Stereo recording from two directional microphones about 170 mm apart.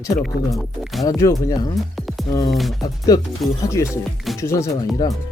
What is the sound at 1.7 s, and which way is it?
Music, centre (ahead or behind).